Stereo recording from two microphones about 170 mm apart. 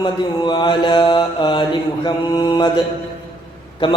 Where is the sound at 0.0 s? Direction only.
25° left (ahead or behind).